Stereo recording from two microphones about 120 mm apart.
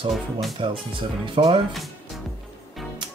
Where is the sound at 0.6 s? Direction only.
45° right (ahead or behind).